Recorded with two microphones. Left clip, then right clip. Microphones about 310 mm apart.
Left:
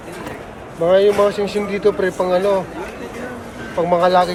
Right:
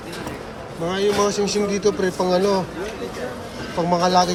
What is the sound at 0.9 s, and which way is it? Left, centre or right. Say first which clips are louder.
Speech: left 7 dB; centre.